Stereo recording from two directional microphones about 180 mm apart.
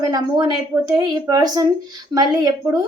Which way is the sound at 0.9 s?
20° right (ahead or behind).